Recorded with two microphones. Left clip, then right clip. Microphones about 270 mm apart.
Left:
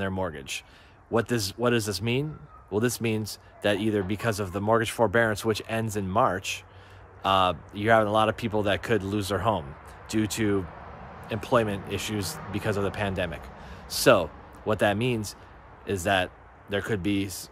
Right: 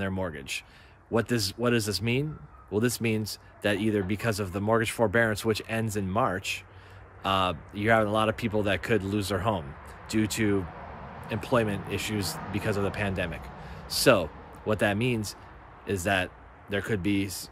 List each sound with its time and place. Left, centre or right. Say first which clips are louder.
0.0 s a man's voice: left 2 dB; centre